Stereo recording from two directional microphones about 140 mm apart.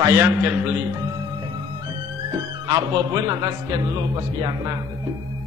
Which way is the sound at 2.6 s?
30° right (ahead or behind).